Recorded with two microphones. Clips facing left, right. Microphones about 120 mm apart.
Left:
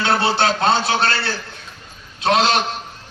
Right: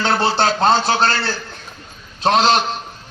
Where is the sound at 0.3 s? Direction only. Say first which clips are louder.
Right 2 dB; 45° right (ahead or behind).